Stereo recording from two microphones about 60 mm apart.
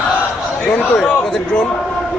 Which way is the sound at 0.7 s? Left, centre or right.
Left.